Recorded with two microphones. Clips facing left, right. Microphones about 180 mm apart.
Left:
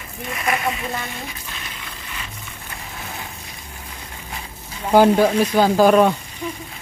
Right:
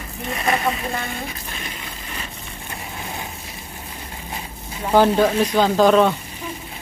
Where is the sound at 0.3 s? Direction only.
30° right (ahead or behind).